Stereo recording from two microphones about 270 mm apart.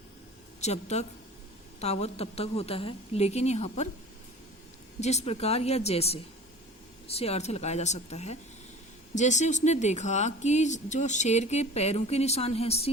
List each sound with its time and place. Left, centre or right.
0.6 s speech: left
4.9 s speech: left